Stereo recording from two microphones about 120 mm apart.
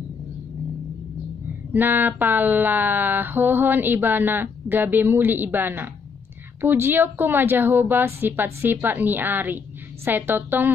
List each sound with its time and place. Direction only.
1.7 s speech: 15° right (ahead or behind)